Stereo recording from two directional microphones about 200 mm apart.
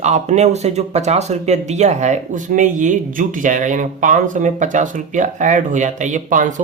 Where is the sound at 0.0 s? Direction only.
35° right (ahead or behind).